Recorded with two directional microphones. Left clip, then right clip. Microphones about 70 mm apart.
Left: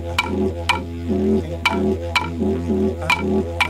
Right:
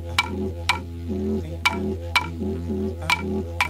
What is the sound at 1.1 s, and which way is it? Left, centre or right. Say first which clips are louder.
Didgeridoo: left 8 dB; left.